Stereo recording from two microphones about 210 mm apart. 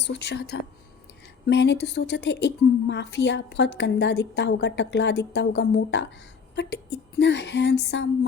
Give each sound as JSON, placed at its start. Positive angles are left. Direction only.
{"t": 0.0, "sound": "a woman's voice", "side_deg": 55}